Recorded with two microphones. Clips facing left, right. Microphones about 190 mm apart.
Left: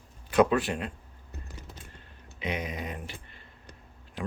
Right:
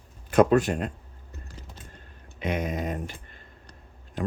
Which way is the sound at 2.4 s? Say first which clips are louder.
Right 5 dB; 50° right (ahead or behind).